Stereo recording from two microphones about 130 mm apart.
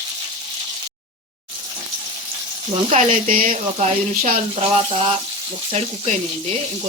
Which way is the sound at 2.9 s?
90° right.